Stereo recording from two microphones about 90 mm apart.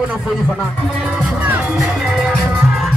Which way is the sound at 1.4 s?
15° right (ahead or behind).